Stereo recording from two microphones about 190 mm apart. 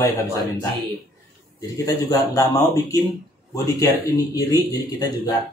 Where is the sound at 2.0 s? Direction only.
15° left (ahead or behind).